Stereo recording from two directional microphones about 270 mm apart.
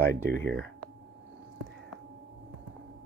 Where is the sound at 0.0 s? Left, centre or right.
Centre.